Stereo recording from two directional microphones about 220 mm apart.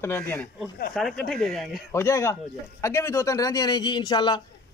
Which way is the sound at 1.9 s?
10° left (ahead or behind).